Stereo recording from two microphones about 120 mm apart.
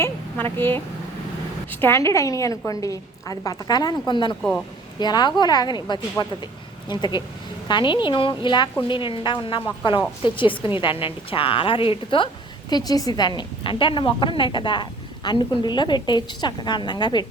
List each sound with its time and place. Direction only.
0.5 s speech: 20° left (ahead or behind)
1.8 s a woman's voice: 20° left (ahead or behind); by 12.3 s 45° left (ahead or behind)
12.7 s a woman's voice: 30° left (ahead or behind)